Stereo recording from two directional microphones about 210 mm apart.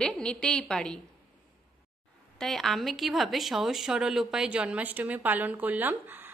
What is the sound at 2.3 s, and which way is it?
Speech, centre (ahead or behind).